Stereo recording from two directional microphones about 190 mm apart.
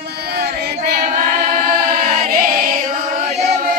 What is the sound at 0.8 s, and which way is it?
Choir, 45° right (ahead or behind).